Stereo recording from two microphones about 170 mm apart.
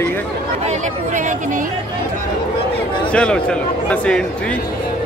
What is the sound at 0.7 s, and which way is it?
Speech, 50° right (ahead or behind).